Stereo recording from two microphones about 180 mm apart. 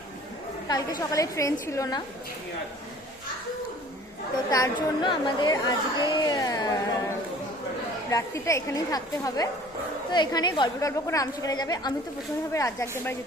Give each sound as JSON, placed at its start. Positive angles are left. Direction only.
{"t": 0.7, "sound": "a woman's voice", "side_deg": 20}
{"t": 4.5, "sound": "a woman's voice", "side_deg": 25}
{"t": 8.1, "sound": "a woman's voice", "side_deg": 15}